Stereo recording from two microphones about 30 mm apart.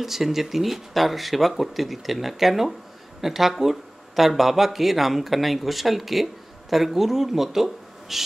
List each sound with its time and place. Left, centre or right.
0.0 s speech: centre